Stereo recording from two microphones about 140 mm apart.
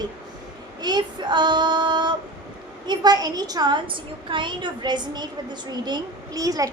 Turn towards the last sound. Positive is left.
turn(degrees=-25)  # may be behind; listen again after turning